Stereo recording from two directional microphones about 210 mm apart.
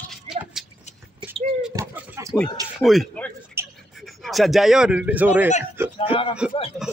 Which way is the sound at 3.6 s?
10° right (ahead or behind).